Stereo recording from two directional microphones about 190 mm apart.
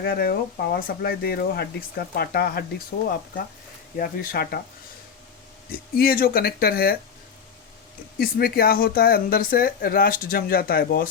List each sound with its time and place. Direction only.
0.0 s speech: 55° left (ahead or behind)
5.7 s speech: 50° left (ahead or behind)
8.2 s speech: 55° left (ahead or behind)